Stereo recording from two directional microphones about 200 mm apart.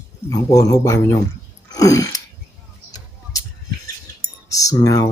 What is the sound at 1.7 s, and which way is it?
Sneeze, 15° left (ahead or behind).